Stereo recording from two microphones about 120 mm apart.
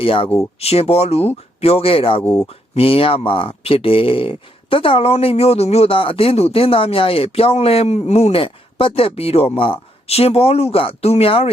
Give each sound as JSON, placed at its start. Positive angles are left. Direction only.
{"t": 0.0, "sound": "speech", "side_deg": 50}